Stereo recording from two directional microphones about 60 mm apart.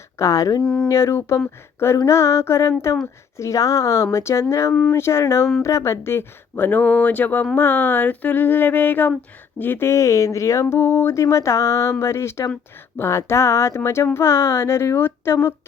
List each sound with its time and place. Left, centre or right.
0.2 s speech: left
0.6 s speech: centre
0.9 s speech: left
6.7 s speech: left
7.5 s a sound: left
9.9 s speech: left